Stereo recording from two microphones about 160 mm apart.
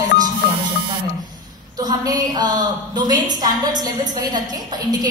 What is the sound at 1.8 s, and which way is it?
A woman's voice, 25° right (ahead or behind).